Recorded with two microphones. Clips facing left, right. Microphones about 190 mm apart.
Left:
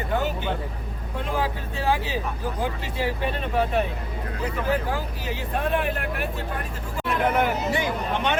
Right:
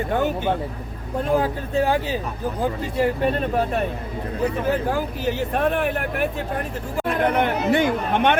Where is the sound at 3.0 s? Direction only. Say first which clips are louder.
Right 6 dB; 55° right (ahead or behind).